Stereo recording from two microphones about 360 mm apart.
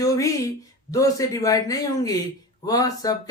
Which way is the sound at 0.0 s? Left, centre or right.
Centre.